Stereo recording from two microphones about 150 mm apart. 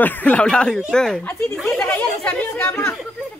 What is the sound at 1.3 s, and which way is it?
Speech, 15° left (ahead or behind).